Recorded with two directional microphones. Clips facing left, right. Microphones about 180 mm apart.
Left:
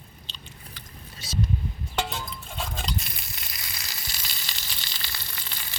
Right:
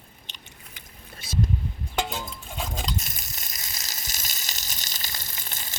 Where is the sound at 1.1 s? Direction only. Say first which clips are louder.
Right 2 dB; 55° right (ahead or behind).